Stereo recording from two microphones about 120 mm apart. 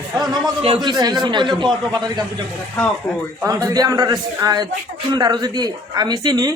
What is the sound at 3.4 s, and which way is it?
A man's voice, 30° right (ahead or behind).